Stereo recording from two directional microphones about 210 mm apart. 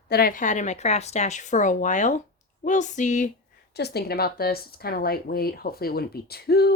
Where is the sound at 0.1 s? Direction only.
45° left (ahead or behind).